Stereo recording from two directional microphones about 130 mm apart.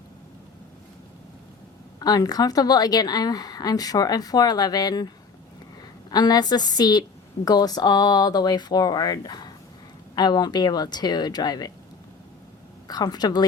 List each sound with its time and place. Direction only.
2.0 s a woman's voice: 30° left (ahead or behind)
12.9 s speech: 30° left (ahead or behind)